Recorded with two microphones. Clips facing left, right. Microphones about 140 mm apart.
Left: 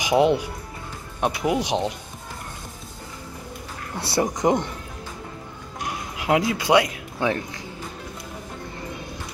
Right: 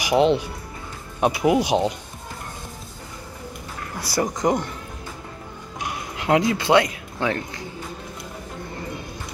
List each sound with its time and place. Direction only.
0.0 s speech: 15° left (ahead or behind)
1.2 s speech: 5° right (ahead or behind)
4.0 s speech: 25° left (ahead or behind)
6.1 s speech: 5° left (ahead or behind)